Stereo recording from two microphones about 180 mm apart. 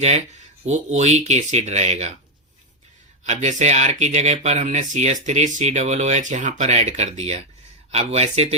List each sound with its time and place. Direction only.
0.0 s speech: 40° right (ahead or behind)
3.2 s speech: 40° right (ahead or behind)